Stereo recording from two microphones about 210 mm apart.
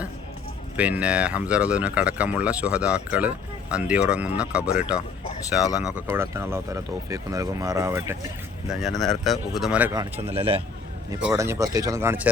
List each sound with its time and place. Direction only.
0.8 s speech: 5° right (ahead or behind)
8.6 s speech: centre (ahead or behind)
10.3 s speech: 25° right (ahead or behind)
11.3 s speech: 15° right (ahead or behind)